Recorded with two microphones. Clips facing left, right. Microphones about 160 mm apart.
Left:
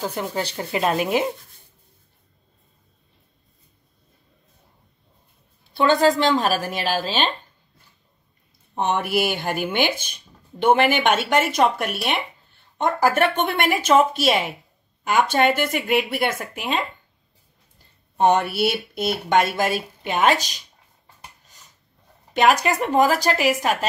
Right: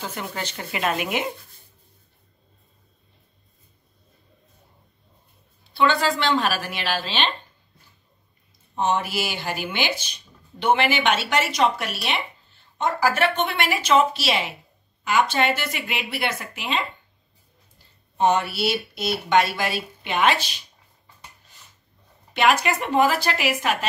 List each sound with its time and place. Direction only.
0.4 s a woman's voice: 35° left (ahead or behind)
5.8 s speech: 45° left (ahead or behind)
8.7 s speech: 60° left (ahead or behind)
18.1 s speech: 55° left (ahead or behind)
22.3 s a woman's voice: 40° left (ahead or behind)